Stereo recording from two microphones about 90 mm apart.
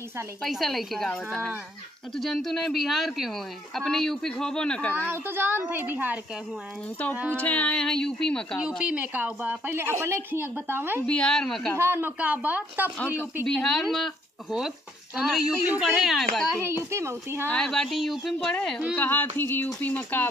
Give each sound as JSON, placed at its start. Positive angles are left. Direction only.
{"t": 0.4, "sound": "speech", "side_deg": 0}
{"t": 2.1, "sound": "speech", "side_deg": 5}
{"t": 5.1, "sound": "a woman's voice", "side_deg": -25}
{"t": 7.3, "sound": "speech", "side_deg": 15}
{"t": 8.5, "sound": "a woman's voice", "side_deg": -10}
{"t": 9.8, "sound": "a woman's voice", "side_deg": -30}
{"t": 11.1, "sound": "speech", "side_deg": 10}
{"t": 11.7, "sound": "a woman's voice", "side_deg": -30}
{"t": 13.5, "sound": "speech", "side_deg": 5}
{"t": 16.6, "sound": "a woman's voice", "side_deg": -30}
{"t": 17.5, "sound": "speech", "side_deg": 5}